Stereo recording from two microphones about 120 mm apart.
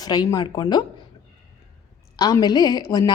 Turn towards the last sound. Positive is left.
turn(degrees=35)  # may be behind; listen again after turning